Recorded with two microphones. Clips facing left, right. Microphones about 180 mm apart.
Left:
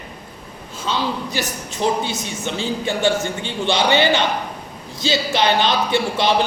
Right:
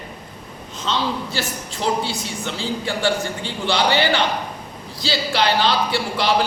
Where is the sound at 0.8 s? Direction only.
15° left (ahead or behind).